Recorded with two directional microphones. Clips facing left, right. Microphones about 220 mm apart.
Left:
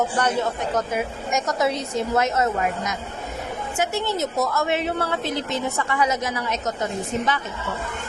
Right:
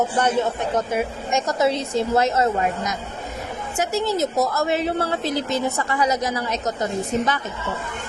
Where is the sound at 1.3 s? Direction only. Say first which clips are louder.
Right 2 dB; 30° right (ahead or behind).